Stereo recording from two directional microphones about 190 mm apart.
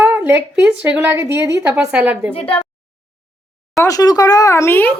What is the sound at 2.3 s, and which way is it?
Speech, 30° left (ahead or behind).